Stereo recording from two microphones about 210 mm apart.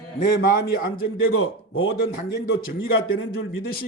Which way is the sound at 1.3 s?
70° left (ahead or behind).